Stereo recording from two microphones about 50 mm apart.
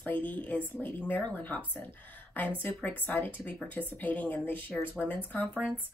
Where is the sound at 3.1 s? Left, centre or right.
Left.